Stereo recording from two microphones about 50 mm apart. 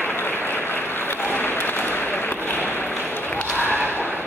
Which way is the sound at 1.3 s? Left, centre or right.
Left.